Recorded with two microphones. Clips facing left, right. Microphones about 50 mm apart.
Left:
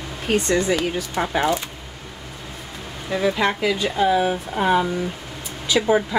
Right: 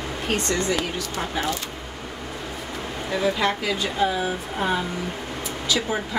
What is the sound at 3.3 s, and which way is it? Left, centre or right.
Speech, centre.